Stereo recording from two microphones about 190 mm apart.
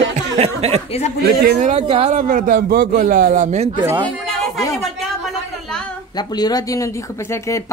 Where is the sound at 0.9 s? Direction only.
35° left (ahead or behind).